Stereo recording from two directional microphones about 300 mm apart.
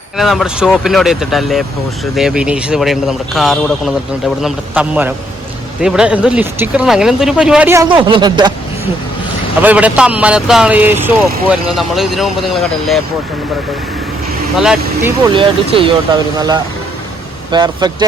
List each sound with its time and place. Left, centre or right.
0.2 s speech: centre
9.6 s speech: centre
14.5 s speech: centre
15.3 s speech: centre
17.5 s speech: centre